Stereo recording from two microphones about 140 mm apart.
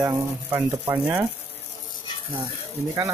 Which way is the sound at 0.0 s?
15° right (ahead or behind).